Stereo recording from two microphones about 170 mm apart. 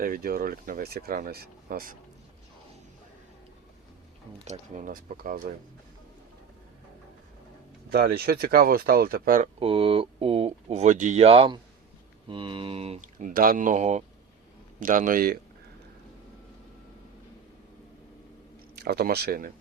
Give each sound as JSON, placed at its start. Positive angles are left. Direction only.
{"t": 0.0, "sound": "speech", "side_deg": -60}
{"t": 4.4, "sound": "speech", "side_deg": -45}
{"t": 7.9, "sound": "speech", "side_deg": -65}
{"t": 9.6, "sound": "speech", "side_deg": -35}
{"t": 13.1, "sound": "speech", "side_deg": -55}
{"t": 18.8, "sound": "speech", "side_deg": -70}